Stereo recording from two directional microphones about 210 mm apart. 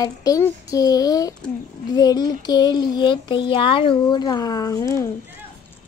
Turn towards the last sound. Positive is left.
turn(degrees=15)  # may be behind; listen again after turning